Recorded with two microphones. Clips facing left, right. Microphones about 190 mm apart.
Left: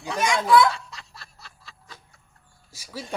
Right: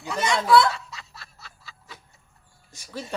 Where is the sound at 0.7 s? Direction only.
Centre (ahead or behind).